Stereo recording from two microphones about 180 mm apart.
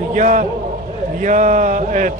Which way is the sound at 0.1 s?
45° right (ahead or behind).